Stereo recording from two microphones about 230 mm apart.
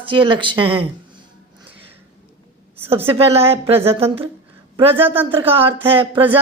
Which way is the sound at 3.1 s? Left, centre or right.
Right.